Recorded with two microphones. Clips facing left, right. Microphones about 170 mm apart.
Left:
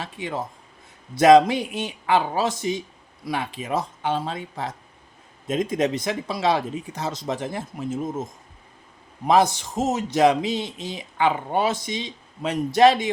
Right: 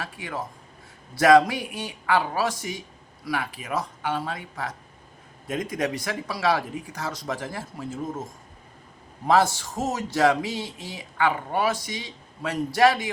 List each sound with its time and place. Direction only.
0.0 s a man's voice: 25° left (ahead or behind)